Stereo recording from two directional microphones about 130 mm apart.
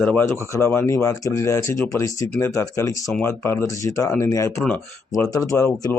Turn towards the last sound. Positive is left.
turn(degrees=20)  # may be behind; listen again after turning